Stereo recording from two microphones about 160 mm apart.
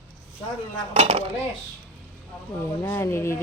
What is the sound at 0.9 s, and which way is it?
Speech, 40° right (ahead or behind).